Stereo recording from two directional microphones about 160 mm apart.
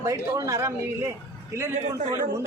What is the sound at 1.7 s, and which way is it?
Speech, 50° right (ahead or behind).